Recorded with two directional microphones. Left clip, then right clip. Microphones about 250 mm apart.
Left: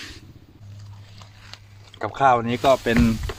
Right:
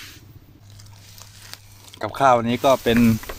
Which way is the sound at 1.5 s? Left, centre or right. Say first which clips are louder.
Right 2 dB; right.